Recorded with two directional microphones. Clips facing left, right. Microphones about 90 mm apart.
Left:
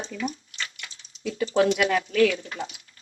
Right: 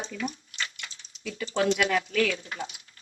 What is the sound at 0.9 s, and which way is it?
Speech, 35° left (ahead or behind).